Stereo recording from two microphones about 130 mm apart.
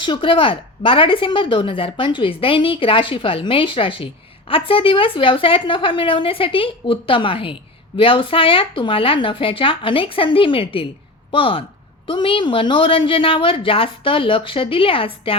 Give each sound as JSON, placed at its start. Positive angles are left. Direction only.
{"t": 0.0, "sound": "speech", "side_deg": 40}